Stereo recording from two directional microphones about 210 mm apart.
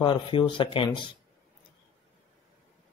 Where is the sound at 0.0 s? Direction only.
25° left (ahead or behind).